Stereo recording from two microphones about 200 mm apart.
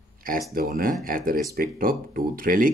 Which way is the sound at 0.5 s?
45° right (ahead or behind).